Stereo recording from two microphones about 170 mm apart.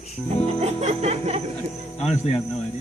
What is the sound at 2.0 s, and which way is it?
Cricket, 40° left (ahead or behind).